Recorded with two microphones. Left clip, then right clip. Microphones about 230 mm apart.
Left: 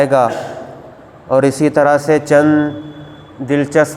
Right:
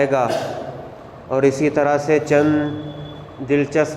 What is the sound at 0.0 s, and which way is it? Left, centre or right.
Speech, left.